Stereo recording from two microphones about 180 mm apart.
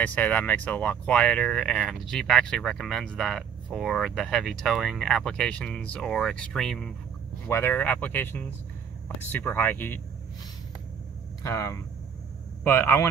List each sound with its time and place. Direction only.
0.0 s speech: 10° left (ahead or behind)
7.4 s speech: 15° left (ahead or behind)
11.4 s speech: 15° left (ahead or behind)